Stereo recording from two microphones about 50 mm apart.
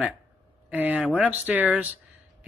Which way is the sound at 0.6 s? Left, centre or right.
Right.